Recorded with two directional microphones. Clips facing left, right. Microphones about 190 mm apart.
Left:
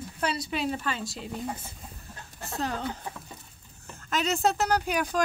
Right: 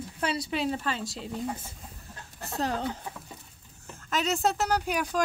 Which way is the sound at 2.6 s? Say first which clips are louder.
Right 2 dB; 30° right (ahead or behind).